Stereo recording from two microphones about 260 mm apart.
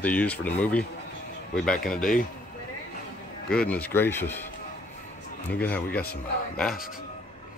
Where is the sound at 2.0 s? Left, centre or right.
Left.